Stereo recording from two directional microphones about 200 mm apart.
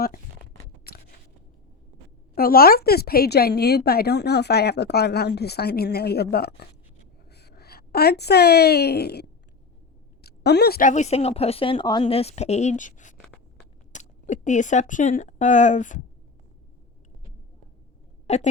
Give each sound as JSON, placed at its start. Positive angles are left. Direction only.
{"t": 0.9, "sound": "shuffling cards", "side_deg": 50}
{"t": 2.3, "sound": "a woman's voice", "side_deg": 50}
{"t": 10.2, "sound": "a woman's voice", "side_deg": 55}
{"t": 18.3, "sound": "a woman's voice", "side_deg": 35}